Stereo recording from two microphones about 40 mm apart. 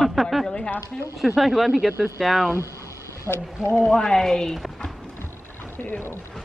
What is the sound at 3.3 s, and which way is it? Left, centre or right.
Speech, centre.